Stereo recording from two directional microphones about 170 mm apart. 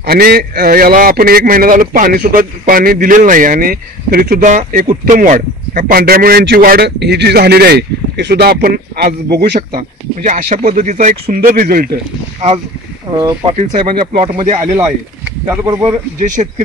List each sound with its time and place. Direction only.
0.0 s speech: 65° right (ahead or behind)
4.5 s speech: 45° right (ahead or behind); by 8.5 s 75° right (ahead or behind)
8.6 s speech: 65° right (ahead or behind)
9.8 s speech: 45° right (ahead or behind)
13.1 s speech: 20° right (ahead or behind)
13.6 s speech: 45° right (ahead or behind)
14.1 s speech: 30° right (ahead or behind)
15.4 s speech: 15° right (ahead or behind)
16.2 s speech: 45° right (ahead or behind)